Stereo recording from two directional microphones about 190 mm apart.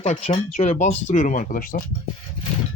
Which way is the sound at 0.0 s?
35° left (ahead or behind).